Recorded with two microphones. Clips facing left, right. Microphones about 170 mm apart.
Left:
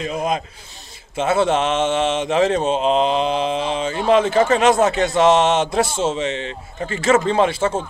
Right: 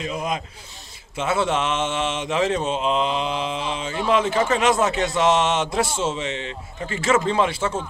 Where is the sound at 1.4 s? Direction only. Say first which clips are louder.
Left 5 dB; 30° left (ahead or behind).